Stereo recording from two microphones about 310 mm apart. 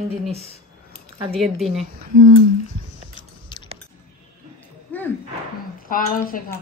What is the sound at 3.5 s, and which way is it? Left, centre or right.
Keys jangling, centre.